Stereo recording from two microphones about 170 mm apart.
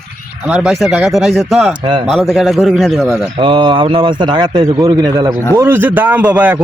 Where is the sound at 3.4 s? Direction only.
30° right (ahead or behind).